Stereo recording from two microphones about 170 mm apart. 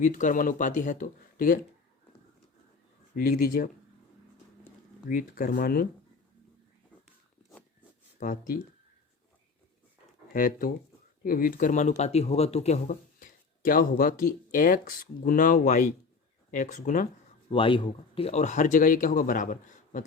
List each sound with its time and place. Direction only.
0.0 s speech: 50° left (ahead or behind)
3.2 s speech: 60° left (ahead or behind)
5.0 s speech: 55° left (ahead or behind)
8.2 s speech: 55° left (ahead or behind)
10.3 s speech: 55° left (ahead or behind); by 12.8 s 40° left (ahead or behind)
12.9 s a sound: 55° left (ahead or behind)
14.5 s speech: 55° left (ahead or behind)
17.5 s speech: 30° left (ahead or behind); by 20.1 s 45° left (ahead or behind)